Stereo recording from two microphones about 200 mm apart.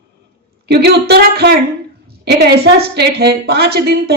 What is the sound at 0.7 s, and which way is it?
Speech, 55° right (ahead or behind).